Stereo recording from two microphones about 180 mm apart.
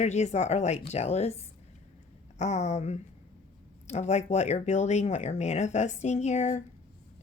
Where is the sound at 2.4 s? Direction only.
40° left (ahead or behind).